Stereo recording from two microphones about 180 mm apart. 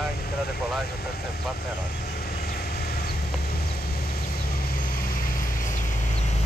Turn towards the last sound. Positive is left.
turn(degrees=35)  # may be behind; listen again after turning